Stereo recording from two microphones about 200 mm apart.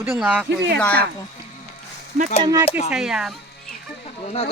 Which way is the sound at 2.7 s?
35° left (ahead or behind).